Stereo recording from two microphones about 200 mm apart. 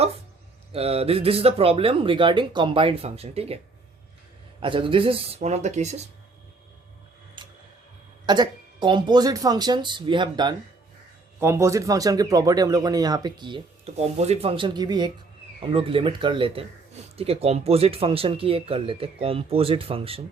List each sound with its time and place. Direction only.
0.7 s speech: 30° right (ahead or behind)
4.6 s speech: 25° right (ahead or behind)
7.4 s tick: 25° right (ahead or behind)
8.3 s speech: 20° right (ahead or behind)